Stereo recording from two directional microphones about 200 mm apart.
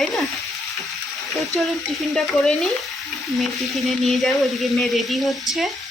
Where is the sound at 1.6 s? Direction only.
Centre (ahead or behind).